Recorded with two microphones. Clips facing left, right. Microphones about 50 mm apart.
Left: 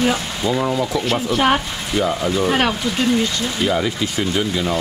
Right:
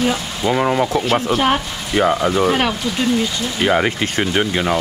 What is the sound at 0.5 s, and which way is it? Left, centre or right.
Speech, right.